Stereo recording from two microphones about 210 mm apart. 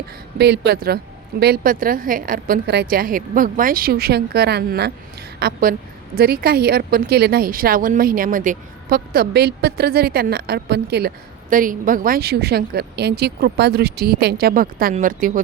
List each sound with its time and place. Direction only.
0.3 s speech: 50° right (ahead or behind)